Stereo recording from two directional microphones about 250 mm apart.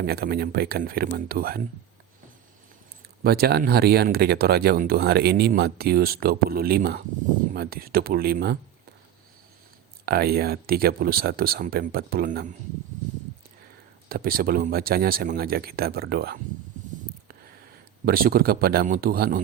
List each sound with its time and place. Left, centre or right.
0.0 s speech: right
3.2 s speech: right
10.1 s speech: right
14.1 s speech: right
18.0 s speech: right